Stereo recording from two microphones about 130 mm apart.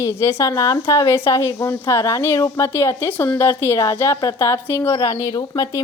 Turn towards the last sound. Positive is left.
turn(degrees=30)  # may be behind; listen again after turning